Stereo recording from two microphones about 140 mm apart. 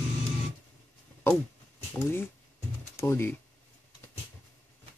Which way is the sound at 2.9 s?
15° left (ahead or behind).